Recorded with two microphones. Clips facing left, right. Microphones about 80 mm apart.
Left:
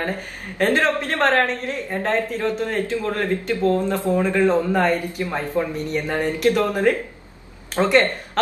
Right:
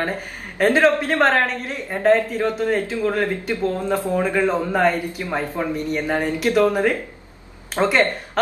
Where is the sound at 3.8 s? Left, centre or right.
Centre.